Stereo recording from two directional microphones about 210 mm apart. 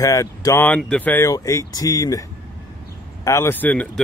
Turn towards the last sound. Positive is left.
turn(degrees=5)  # may be behind; listen again after turning